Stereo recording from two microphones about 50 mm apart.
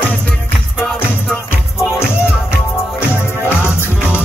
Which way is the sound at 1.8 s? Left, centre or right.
Left.